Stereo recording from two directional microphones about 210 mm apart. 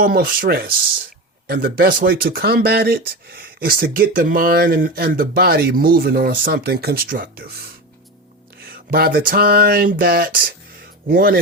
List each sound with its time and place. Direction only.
0.0 s speech: 45° right (ahead or behind)
8.6 s speech: 45° right (ahead or behind)